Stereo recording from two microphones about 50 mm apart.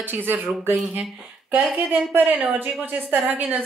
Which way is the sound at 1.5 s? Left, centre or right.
Right.